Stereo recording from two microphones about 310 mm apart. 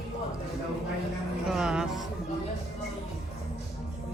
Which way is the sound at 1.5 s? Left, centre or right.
Centre.